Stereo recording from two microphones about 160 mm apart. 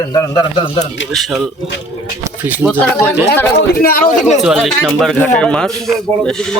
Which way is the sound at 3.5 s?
65° left (ahead or behind).